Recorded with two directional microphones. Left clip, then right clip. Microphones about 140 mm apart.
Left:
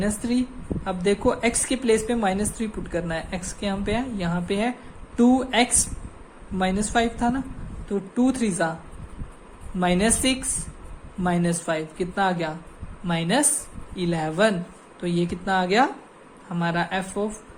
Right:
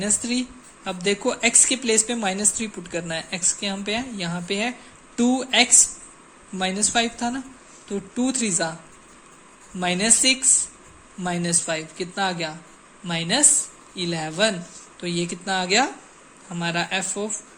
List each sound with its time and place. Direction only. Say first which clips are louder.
0.0 s a woman's voice: even; 25° right (ahead or behind)
9.8 s a woman's voice: right 2 dB; 20° right (ahead or behind)